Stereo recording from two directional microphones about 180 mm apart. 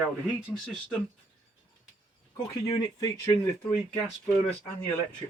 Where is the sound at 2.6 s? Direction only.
20° left (ahead or behind).